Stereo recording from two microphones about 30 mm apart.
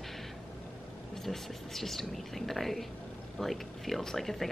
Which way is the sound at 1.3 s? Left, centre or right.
Centre.